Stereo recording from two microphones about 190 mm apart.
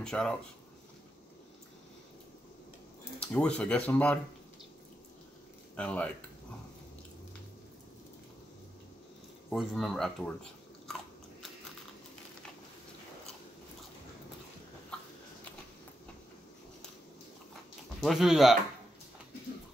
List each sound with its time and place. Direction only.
0.0 s speech: 5° left (ahead or behind)
3.2 s speech: 5° left (ahead or behind)
5.8 s speech: 5° left (ahead or behind)
9.5 s speech: centre (ahead or behind)
14.9 s a sound: 5° left (ahead or behind)
18.0 s speech: centre (ahead or behind)